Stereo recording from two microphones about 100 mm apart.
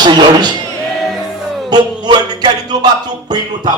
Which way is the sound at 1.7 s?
45° right (ahead or behind).